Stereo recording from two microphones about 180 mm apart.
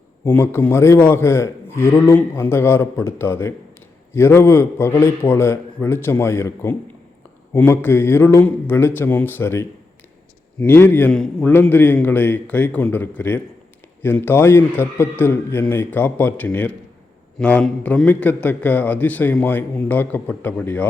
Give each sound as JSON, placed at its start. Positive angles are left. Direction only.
{"t": 0.3, "sound": "a man's voice", "side_deg": 15}